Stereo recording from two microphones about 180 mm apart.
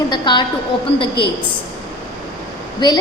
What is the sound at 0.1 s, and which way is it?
Speech, 25° left (ahead or behind).